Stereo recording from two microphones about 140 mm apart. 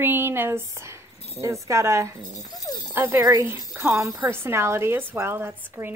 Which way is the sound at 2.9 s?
15° right (ahead or behind).